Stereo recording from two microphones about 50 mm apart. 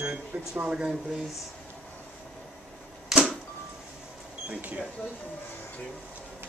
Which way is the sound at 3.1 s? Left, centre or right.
Centre.